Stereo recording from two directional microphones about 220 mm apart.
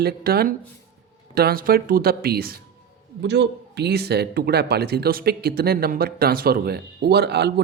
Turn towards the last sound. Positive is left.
turn(degrees=-50)  # may be behind; listen again after turning